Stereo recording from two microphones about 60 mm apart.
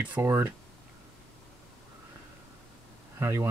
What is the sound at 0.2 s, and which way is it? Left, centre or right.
Speech, right.